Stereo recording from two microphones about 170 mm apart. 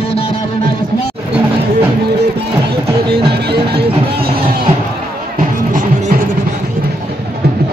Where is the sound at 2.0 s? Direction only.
75° right (ahead or behind).